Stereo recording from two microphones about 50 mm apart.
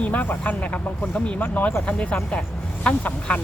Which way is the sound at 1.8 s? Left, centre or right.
Left.